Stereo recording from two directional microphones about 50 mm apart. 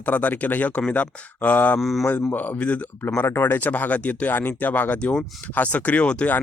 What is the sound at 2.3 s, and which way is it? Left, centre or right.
Speech, left.